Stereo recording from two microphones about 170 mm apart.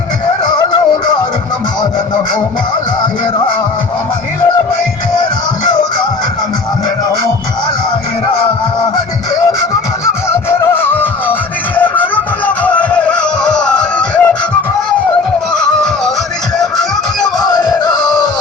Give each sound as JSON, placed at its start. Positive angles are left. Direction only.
{"t": 10.9, "sound": "music", "side_deg": 10}
{"t": 16.6, "sound": "music", "side_deg": 0}
{"t": 17.5, "sound": "music", "side_deg": 25}